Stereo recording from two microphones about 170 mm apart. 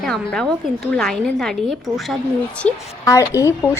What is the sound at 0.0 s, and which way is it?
A woman's voice, 5° left (ahead or behind).